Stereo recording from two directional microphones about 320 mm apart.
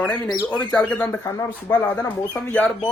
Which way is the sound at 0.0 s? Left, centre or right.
Centre.